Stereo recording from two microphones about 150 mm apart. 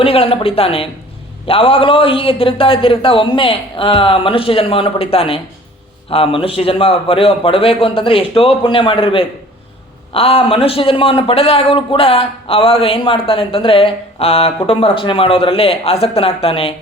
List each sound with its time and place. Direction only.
0.0 s a man's voice: 40° left (ahead or behind)